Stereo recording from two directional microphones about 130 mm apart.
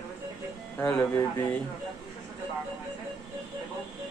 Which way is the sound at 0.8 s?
15° left (ahead or behind).